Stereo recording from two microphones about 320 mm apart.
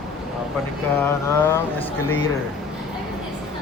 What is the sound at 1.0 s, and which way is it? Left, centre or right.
Vehicle, centre.